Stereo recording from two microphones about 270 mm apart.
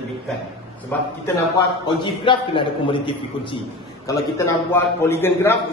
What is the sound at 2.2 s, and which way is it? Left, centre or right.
A man's voice, centre.